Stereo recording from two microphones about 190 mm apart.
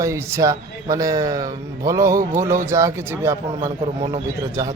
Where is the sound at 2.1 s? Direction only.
45° right (ahead or behind).